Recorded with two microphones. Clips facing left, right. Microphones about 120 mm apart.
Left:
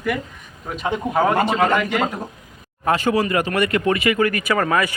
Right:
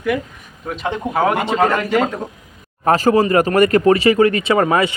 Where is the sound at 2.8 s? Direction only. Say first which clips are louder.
Right 5 dB; 40° right (ahead or behind).